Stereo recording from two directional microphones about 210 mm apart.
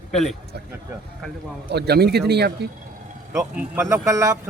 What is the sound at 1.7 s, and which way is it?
Speech, 50° right (ahead or behind).